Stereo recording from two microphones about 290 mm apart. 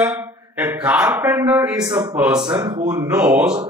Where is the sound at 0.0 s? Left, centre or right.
Centre.